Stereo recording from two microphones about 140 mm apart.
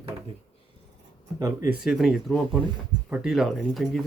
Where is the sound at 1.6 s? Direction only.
5° right (ahead or behind).